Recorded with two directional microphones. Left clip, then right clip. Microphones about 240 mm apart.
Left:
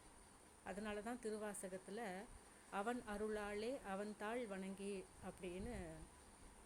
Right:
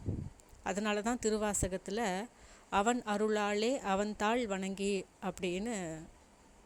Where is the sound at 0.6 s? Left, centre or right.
Right.